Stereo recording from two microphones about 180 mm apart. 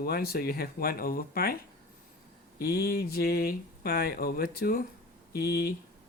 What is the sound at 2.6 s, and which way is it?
Speech, 55° left (ahead or behind).